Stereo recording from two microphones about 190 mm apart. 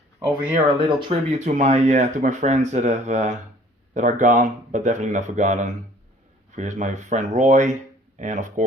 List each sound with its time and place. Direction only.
0.2 s speech: 10° right (ahead or behind)
0.7 s speech: 25° right (ahead or behind)
1.4 s speech: 40° right (ahead or behind)